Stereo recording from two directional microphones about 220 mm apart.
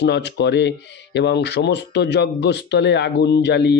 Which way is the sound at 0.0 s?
50° left (ahead or behind).